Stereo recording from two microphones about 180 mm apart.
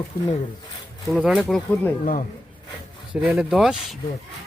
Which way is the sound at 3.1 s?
5° right (ahead or behind).